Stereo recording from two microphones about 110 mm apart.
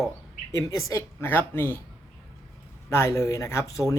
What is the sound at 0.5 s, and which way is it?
Speech, 25° left (ahead or behind).